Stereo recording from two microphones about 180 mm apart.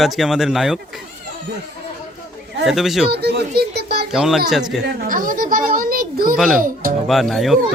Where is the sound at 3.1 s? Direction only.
65° right (ahead or behind).